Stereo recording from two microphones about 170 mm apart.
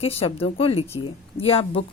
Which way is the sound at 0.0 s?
35° left (ahead or behind).